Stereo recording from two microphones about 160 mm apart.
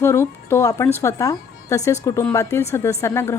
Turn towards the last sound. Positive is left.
turn(degrees=15)  # may be behind; listen again after turning